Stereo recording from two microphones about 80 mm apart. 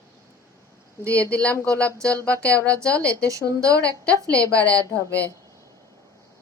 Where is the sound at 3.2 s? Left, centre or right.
Right.